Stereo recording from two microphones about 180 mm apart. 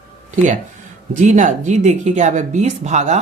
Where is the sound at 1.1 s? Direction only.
45° right (ahead or behind).